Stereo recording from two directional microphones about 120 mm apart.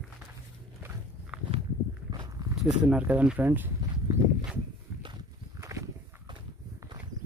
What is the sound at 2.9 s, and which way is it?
Speech, 10° right (ahead or behind).